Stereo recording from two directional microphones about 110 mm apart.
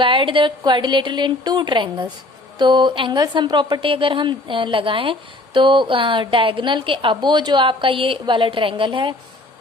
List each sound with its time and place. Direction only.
0.0 s a woman's voice: 50° right (ahead or behind)